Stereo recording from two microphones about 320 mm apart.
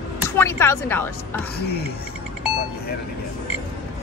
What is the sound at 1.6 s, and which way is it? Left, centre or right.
Speech, left.